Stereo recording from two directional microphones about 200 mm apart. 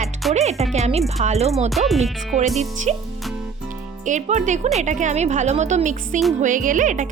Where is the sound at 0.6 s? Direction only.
35° right (ahead or behind).